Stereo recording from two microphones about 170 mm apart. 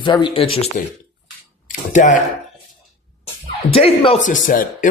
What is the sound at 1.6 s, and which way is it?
Speech, 50° left (ahead or behind).